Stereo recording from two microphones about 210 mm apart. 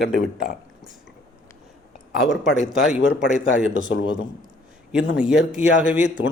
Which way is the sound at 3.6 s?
40° right (ahead or behind).